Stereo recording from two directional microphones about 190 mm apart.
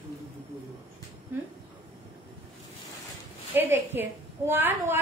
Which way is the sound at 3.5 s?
10° right (ahead or behind).